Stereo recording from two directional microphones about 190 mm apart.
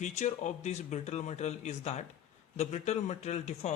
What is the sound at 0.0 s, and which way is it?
A man's voice, 40° left (ahead or behind).